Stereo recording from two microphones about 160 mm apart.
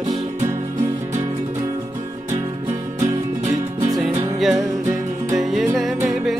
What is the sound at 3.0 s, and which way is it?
Music, 50° right (ahead or behind).